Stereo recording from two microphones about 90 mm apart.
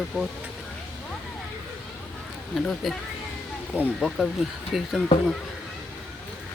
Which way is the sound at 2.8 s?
Centre (ahead or behind).